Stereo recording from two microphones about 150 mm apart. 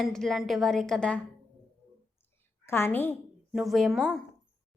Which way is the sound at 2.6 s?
15° left (ahead or behind).